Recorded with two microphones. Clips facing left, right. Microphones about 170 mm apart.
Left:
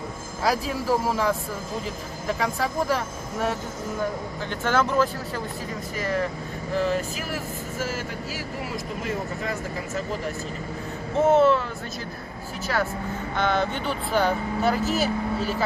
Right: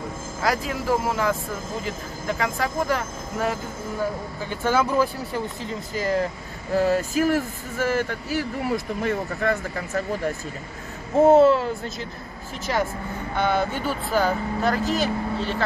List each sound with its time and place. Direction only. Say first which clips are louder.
0.8 s speech: right 1 dB; centre (ahead or behind)
4.5 s speech: right 2 dB; 10° right (ahead or behind)
5.9 s speech: right 3 dB; 35° right (ahead or behind)
6.8 s speech: right 6 dB; 45° right (ahead or behind); by 10.0 s 60° right (ahead or behind)
11.1 s speech: right 4 dB; 35° right (ahead or behind)
13.4 s speech: right 2 dB; 10° right (ahead or behind)